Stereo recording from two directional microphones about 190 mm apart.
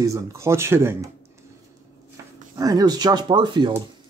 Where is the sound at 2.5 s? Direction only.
20° right (ahead or behind).